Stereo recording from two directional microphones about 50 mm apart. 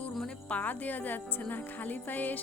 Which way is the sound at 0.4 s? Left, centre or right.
Left.